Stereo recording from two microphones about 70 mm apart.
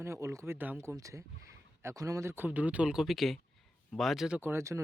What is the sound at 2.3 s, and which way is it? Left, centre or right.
Speech, right.